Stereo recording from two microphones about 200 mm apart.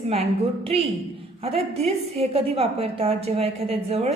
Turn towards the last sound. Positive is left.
turn(degrees=-30)  # may be behind; listen again after turning